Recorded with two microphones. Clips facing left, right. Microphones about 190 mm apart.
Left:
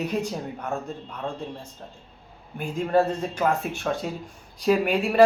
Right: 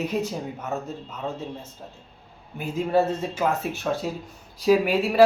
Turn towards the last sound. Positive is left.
turn(degrees=0)  # may be behind; listen again after turning